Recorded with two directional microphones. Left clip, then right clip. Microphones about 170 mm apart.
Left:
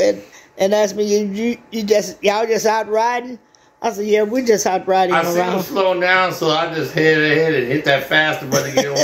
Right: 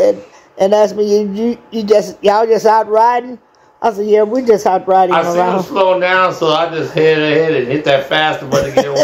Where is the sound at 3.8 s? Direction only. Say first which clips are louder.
Right 5 dB; 20° right (ahead or behind).